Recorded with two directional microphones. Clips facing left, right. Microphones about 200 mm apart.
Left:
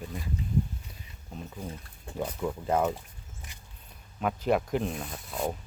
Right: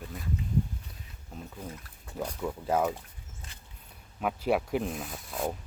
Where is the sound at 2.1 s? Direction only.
5° left (ahead or behind).